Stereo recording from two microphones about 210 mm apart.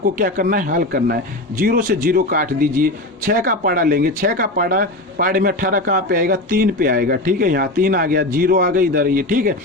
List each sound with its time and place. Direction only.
0.0 s speech: 40° right (ahead or behind)